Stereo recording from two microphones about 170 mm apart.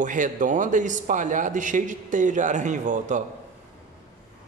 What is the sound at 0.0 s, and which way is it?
Speech, 50° right (ahead or behind).